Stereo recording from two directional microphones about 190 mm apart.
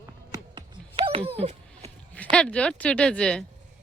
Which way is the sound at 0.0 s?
20° right (ahead or behind).